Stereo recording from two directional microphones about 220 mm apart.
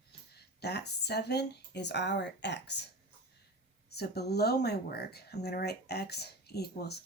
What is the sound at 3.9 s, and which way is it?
Speech, 50° left (ahead or behind).